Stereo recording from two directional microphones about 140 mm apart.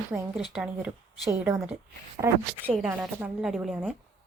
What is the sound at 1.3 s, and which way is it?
A woman's voice, 20° right (ahead or behind).